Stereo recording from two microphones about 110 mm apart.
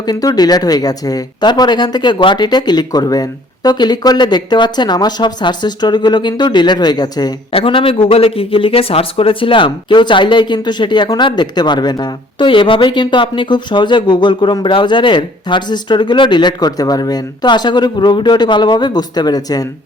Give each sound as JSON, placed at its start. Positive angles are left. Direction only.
{"t": 0.0, "sound": "speech", "side_deg": 35}
{"t": 7.5, "sound": "a man's voice", "side_deg": 55}